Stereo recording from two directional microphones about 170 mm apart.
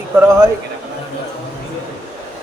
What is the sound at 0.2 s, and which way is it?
Speech, 15° right (ahead or behind).